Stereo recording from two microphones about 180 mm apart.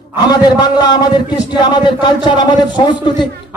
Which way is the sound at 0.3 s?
20° left (ahead or behind).